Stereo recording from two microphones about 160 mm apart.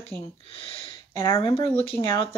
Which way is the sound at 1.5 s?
35° left (ahead or behind).